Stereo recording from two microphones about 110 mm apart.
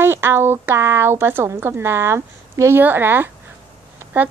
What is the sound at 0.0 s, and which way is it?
A woman's voice, 20° right (ahead or behind).